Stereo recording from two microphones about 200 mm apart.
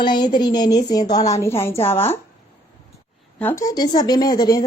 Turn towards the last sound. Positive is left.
turn(degrees=20)  # may be behind; listen again after turning